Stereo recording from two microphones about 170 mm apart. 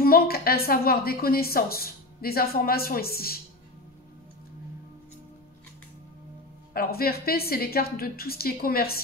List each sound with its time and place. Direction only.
0.0 s a woman's voice: 60° left (ahead or behind)
6.7 s a woman's voice: 65° left (ahead or behind)